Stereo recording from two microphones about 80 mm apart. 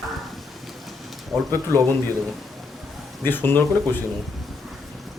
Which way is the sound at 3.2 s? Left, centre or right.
Left.